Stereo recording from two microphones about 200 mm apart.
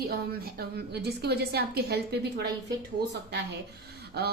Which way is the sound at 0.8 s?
55° right (ahead or behind).